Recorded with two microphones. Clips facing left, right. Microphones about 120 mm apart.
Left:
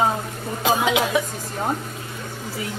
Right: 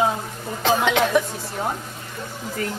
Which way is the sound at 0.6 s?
10° left (ahead or behind).